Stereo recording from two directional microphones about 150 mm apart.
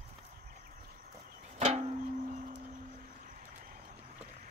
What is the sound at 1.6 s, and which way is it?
Music, 45° right (ahead or behind).